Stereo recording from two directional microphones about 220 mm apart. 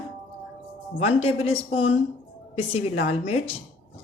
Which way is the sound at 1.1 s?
25° left (ahead or behind).